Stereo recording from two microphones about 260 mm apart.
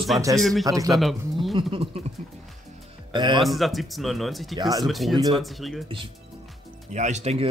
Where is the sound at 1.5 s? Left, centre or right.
Right.